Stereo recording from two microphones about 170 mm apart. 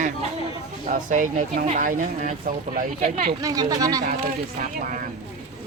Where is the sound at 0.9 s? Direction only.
50° right (ahead or behind).